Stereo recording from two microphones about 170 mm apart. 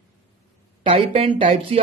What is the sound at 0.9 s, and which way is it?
Speech, 35° right (ahead or behind).